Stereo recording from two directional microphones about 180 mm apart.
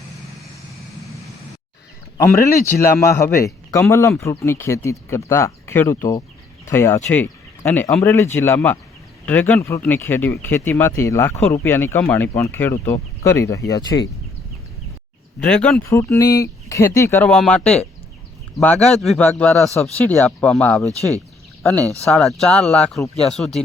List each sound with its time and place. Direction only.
2.1 s speech: 15° left (ahead or behind)
2.8 s speech: 50° left (ahead or behind)
3.1 s speech: 15° left (ahead or behind)
15.4 s speech: 5° left (ahead or behind)
15.8 s speech: 15° left (ahead or behind)
22.1 s speech: 5° left (ahead or behind)